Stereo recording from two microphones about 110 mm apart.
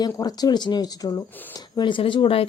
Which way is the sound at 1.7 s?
45° left (ahead or behind).